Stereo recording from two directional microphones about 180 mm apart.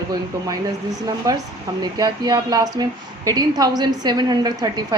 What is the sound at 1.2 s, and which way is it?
Speech, 20° right (ahead or behind).